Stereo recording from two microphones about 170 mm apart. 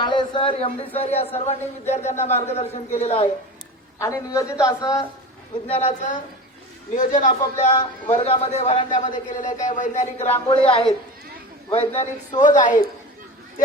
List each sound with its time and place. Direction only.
0.0 s a sound: 25° left (ahead or behind)
0.9 s a man's voice: 35° left (ahead or behind)
3.9 s a woman's voice: 15° left (ahead or behind)
5.6 s a man's voice: 35° left (ahead or behind)
7.1 s a man's voice: 50° left (ahead or behind); by 12.4 s 30° left (ahead or behind)
12.4 s a man's voice: 50° left (ahead or behind)